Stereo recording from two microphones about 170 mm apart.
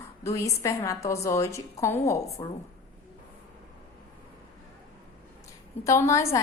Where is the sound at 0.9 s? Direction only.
20° left (ahead or behind).